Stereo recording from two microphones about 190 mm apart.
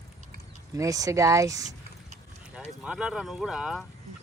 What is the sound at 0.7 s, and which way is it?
Speech, 20° right (ahead or behind).